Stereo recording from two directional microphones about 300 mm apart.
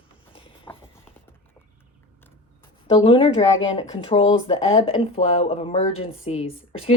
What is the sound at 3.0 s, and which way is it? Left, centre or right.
Speech, centre.